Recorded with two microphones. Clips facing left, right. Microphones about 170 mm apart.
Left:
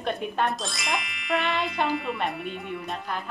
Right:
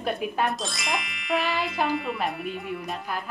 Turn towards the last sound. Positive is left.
turn(degrees=0)  # may be behind; listen again after turning